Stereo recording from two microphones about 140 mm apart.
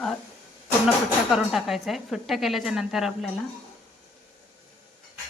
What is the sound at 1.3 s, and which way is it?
Speech, centre (ahead or behind).